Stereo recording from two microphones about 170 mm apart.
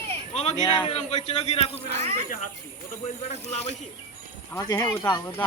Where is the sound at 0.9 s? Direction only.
40° left (ahead or behind).